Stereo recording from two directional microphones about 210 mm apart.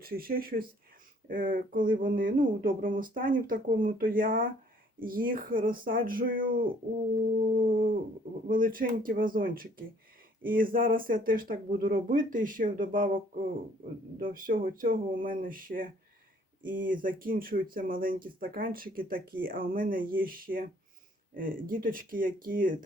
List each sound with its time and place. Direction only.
0.0 s speech: 45° right (ahead or behind)